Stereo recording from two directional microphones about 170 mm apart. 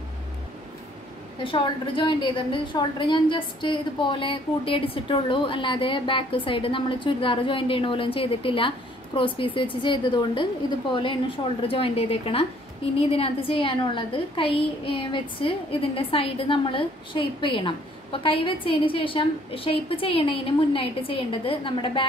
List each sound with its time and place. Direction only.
1.4 s a woman's voice: 30° left (ahead or behind)